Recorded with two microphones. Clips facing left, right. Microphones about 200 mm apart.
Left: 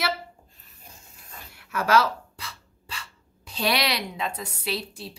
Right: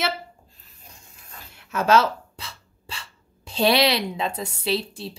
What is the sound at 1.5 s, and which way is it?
Speech, 25° right (ahead or behind).